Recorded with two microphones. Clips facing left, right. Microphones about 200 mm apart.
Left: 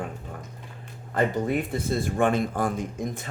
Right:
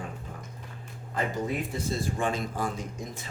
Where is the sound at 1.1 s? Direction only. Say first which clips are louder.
Left 6 dB; 60° left (ahead or behind).